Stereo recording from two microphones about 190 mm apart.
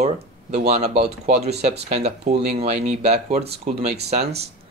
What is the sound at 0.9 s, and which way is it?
Speech, 60° right (ahead or behind).